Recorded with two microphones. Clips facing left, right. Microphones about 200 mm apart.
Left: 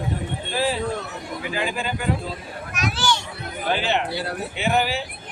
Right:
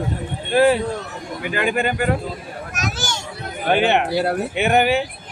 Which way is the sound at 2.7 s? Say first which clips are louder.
Left 3 dB; 45° right (ahead or behind).